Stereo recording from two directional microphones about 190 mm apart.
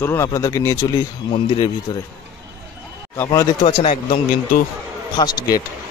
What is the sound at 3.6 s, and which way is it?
Speech, 30° left (ahead or behind).